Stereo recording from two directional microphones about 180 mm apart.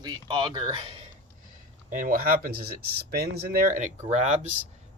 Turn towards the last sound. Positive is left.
turn(degrees=-40)  # may be behind; listen again after turning